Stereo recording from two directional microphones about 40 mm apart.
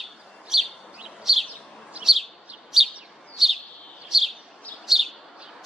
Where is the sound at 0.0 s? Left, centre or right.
Centre.